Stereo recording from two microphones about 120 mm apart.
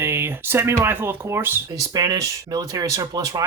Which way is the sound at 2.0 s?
30° right (ahead or behind).